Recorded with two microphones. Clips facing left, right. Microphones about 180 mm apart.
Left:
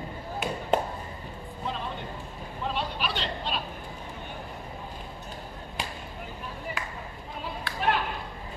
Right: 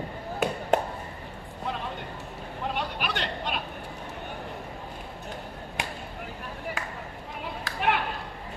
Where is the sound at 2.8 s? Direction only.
60° right (ahead or behind).